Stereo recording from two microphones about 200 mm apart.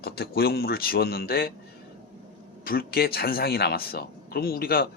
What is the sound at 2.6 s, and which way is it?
Speech, 45° left (ahead or behind).